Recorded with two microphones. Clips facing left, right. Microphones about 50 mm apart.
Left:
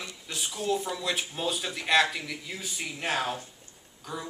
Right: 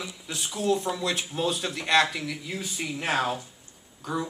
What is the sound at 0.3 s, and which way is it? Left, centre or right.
Speech, centre.